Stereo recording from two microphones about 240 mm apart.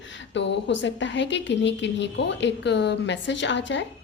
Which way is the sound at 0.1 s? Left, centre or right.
Left.